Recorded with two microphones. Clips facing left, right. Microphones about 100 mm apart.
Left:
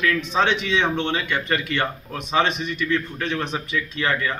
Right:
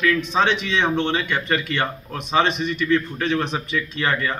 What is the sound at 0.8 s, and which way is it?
A man's voice, 10° right (ahead or behind).